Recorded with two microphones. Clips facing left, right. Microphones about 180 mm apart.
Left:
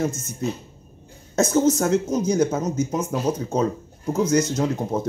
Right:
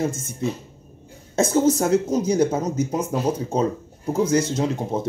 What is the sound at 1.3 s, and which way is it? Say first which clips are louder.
Speech: even; 30° right (ahead or behind).